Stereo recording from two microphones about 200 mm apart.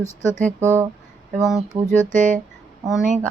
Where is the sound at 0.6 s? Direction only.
10° right (ahead or behind).